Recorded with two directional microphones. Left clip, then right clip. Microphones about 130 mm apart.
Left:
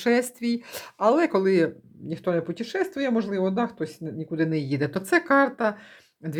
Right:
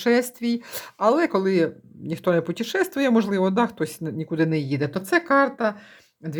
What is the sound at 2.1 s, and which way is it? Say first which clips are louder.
Speech: right 4 dB; 25° right (ahead or behind).